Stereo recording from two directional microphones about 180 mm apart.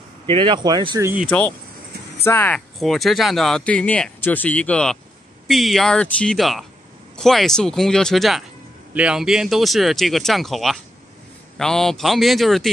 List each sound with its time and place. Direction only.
0.3 s speech: 25° right (ahead or behind)
2.2 s speech: 10° left (ahead or behind)